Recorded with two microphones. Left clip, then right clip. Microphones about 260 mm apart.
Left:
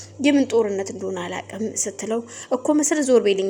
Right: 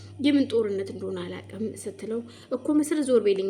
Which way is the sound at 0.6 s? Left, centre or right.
Centre.